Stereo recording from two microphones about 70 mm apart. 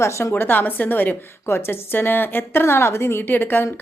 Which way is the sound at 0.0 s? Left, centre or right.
Left.